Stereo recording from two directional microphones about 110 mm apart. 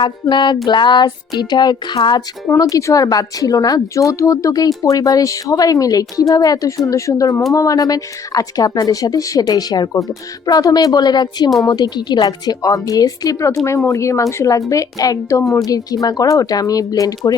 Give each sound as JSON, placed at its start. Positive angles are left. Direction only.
{"t": 0.0, "sound": "speech", "side_deg": 45}
{"t": 2.6, "sound": "a woman's voice", "side_deg": 30}